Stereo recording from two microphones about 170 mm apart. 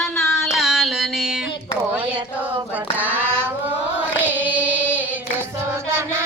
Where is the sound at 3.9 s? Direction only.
10° right (ahead or behind).